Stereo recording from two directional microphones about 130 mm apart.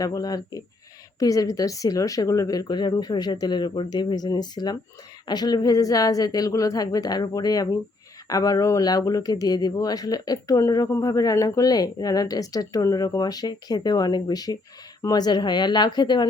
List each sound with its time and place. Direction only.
0.0 s a woman's voice: 30° left (ahead or behind)